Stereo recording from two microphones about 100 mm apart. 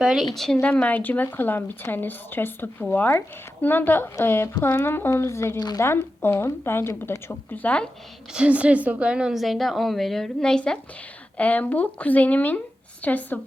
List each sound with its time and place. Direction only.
0.0 s a woman's voice: 5° right (ahead or behind)
0.6 s speech: 15° left (ahead or behind)
5.5 s speech: 45° left (ahead or behind)
5.8 s speech: 25° left (ahead or behind)
7.6 s speech: 10° left (ahead or behind)
8.3 s a woman's voice: 10° right (ahead or behind); by 13.4 s 15° left (ahead or behind)